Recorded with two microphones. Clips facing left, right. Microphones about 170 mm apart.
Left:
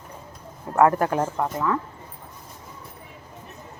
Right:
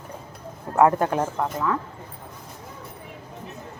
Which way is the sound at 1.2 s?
Centre (ahead or behind).